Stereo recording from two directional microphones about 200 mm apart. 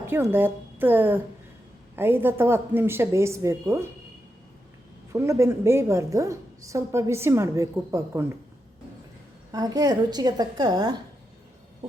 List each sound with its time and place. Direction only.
0.1 s a woman's voice: 10° right (ahead or behind)
5.1 s a woman's voice: 15° right (ahead or behind)
9.5 s a woman's voice: 20° right (ahead or behind)